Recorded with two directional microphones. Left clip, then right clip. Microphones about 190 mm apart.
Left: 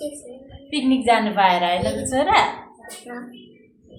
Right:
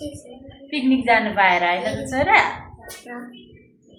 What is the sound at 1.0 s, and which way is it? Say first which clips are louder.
A woman's voice: even; 5° left (ahead or behind).